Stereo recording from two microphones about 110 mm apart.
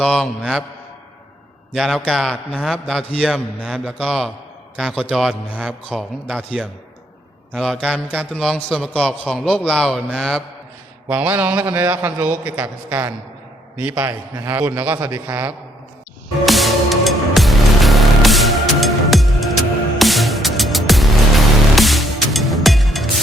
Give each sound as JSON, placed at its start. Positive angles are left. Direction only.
{"t": 0.0, "sound": "a man's voice", "side_deg": 5}
{"t": 1.7, "sound": "a man's voice", "side_deg": 0}
{"t": 7.9, "sound": "a man's voice", "side_deg": 10}
{"t": 8.9, "sound": "a man's voice", "side_deg": 10}
{"t": 11.1, "sound": "a man's voice", "side_deg": -15}
{"t": 14.4, "sound": "a man's voice", "side_deg": -20}
{"t": 16.5, "sound": "music", "side_deg": 0}